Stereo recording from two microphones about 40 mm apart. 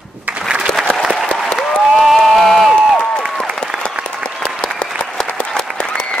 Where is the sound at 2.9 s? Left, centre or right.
Left.